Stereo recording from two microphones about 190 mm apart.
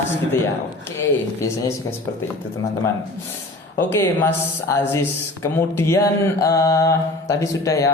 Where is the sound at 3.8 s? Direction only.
15° left (ahead or behind).